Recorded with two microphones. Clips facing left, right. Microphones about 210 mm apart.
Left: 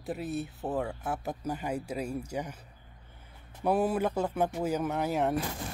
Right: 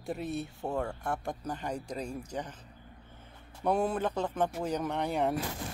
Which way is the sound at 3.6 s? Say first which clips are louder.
Left 2 dB; 5° left (ahead or behind).